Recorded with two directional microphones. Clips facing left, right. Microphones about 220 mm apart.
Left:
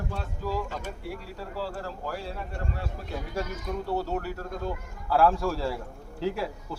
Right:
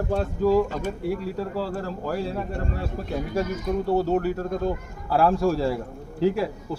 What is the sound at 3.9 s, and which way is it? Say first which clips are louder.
A man's voice: right 8 dB; 20° right (ahead or behind).